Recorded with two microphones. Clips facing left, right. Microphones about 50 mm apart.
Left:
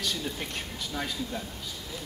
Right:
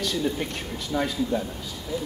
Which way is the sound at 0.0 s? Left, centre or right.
Centre.